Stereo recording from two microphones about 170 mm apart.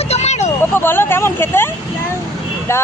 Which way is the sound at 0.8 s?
15° left (ahead or behind).